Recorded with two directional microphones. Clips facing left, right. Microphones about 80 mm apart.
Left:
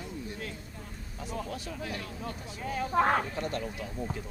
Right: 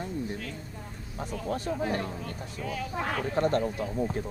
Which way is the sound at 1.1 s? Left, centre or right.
Right.